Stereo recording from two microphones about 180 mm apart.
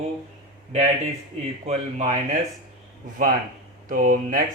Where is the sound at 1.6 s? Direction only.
40° right (ahead or behind).